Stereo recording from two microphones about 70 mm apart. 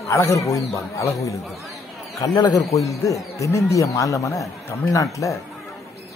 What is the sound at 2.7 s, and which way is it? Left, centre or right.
A man's voice, left.